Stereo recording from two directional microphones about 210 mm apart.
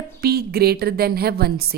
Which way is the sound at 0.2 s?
50° right (ahead or behind).